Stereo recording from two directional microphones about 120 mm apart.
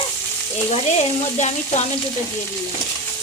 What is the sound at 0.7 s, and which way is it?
Frying, 70° left (ahead or behind).